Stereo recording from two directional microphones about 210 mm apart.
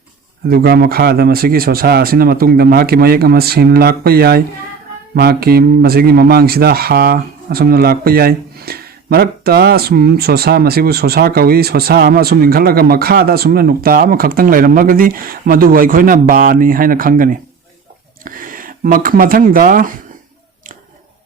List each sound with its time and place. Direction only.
0.4 s speech: 50° right (ahead or behind)